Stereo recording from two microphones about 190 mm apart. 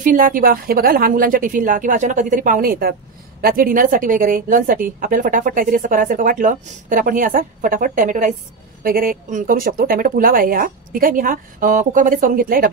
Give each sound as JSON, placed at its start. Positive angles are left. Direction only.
{"t": 0.0, "sound": "a woman's voice", "side_deg": -45}